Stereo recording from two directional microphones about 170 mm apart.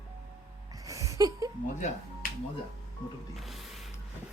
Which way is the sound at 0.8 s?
20° right (ahead or behind).